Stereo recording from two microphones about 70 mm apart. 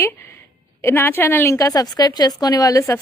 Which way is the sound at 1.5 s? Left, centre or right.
Left.